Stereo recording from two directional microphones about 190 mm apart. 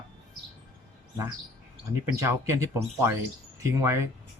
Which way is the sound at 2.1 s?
15° right (ahead or behind).